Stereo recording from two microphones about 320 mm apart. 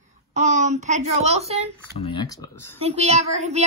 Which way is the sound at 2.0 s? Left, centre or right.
Centre.